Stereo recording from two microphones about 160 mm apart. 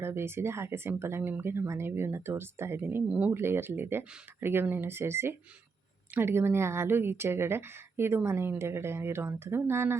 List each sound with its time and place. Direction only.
0.0 s speech: 15° right (ahead or behind)